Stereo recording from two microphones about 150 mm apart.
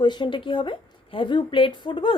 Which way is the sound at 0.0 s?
30° left (ahead or behind).